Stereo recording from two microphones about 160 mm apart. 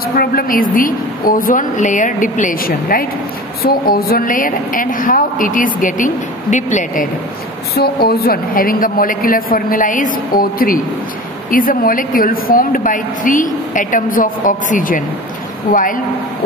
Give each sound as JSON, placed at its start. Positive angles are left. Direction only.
{"t": 0.1, "sound": "a woman's voice", "side_deg": 65}
{"t": 7.7, "sound": "a woman's voice", "side_deg": 75}